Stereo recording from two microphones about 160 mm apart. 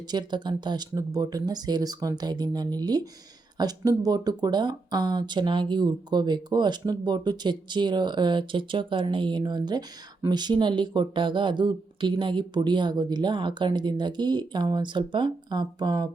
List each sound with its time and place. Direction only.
0.1 s speech: 25° right (ahead or behind)